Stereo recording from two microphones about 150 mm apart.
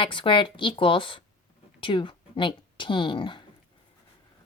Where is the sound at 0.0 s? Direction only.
35° left (ahead or behind).